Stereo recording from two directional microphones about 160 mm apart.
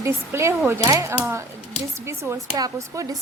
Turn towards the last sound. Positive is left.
turn(degrees=-20)  # may be behind; listen again after turning